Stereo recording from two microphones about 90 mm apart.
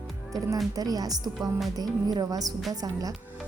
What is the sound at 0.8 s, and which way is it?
Speech, 45° right (ahead or behind).